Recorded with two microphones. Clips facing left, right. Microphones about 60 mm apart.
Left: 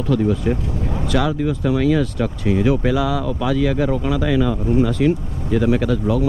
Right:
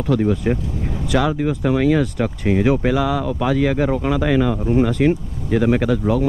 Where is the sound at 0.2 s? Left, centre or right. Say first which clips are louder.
Even; right.